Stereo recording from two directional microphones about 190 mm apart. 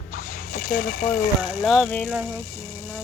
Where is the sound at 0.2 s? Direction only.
50° left (ahead or behind).